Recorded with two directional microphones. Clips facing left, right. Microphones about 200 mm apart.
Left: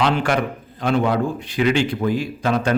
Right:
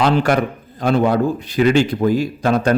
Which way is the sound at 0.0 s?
40° right (ahead or behind).